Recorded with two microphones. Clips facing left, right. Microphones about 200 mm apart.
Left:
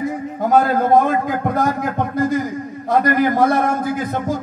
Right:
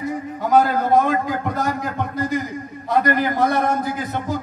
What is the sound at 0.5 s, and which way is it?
A man's voice, 50° left (ahead or behind).